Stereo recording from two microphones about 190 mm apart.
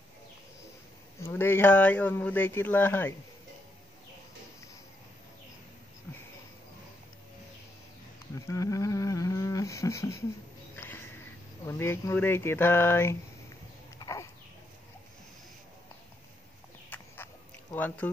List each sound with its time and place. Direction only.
1.2 s speech: 10° left (ahead or behind)
8.5 s a sound: 15° left (ahead or behind)
11.6 s speech: 15° left (ahead or behind)
13.9 s dog: 20° left (ahead or behind)
16.9 s a sound: 10° left (ahead or behind)
17.7 s speech: 10° left (ahead or behind)